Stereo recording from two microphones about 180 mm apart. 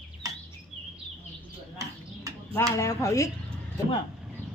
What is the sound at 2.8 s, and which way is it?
Speech, 15° left (ahead or behind).